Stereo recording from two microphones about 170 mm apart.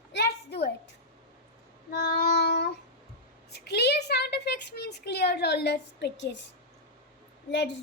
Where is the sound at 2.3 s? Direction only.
80° left.